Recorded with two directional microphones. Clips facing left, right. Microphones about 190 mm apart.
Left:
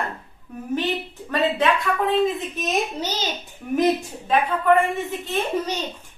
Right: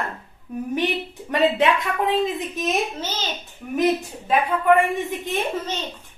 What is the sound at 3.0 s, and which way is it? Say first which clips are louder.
Speech: left 2 dB; 15° left (ahead or behind).